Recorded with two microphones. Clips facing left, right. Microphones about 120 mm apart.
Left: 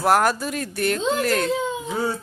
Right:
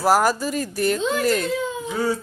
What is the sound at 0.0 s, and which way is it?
Speech, 5° right (ahead or behind).